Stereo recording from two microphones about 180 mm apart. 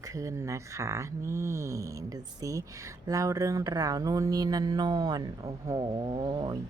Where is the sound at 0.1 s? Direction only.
15° right (ahead or behind).